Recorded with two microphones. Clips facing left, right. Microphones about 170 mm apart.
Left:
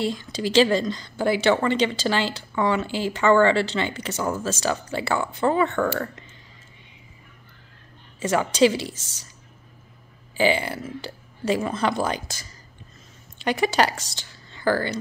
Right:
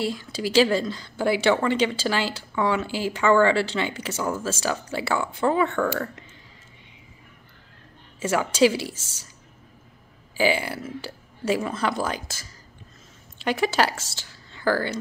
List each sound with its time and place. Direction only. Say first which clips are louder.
0.0 s a woman's voice: left 1 dB; 5° right (ahead or behind)
8.2 s a woman's voice: left 1 dB; 5° right (ahead or behind)
10.3 s a woman's voice: left 1 dB; 5° right (ahead or behind)